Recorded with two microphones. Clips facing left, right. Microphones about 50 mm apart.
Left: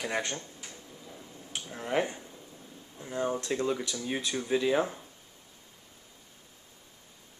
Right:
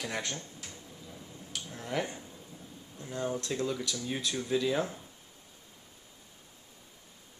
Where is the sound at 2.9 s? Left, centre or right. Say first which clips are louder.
Left 3 dB; centre.